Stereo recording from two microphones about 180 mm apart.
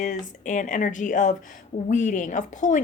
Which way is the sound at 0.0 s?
45° left (ahead or behind).